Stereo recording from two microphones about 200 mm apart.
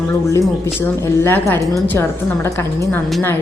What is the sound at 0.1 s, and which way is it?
A woman's voice, 15° left (ahead or behind).